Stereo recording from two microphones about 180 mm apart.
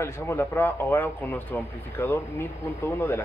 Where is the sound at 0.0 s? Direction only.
15° left (ahead or behind).